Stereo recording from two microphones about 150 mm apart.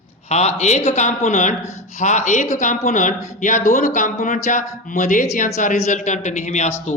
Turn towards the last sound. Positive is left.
turn(degrees=50)  # may be behind; listen again after turning